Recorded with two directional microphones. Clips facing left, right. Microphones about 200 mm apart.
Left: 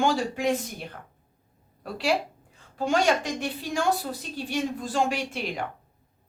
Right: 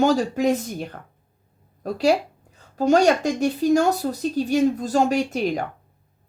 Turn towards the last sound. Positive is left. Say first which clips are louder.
# right 9 dB
turn(degrees=-40)  # may be behind; listen again after turning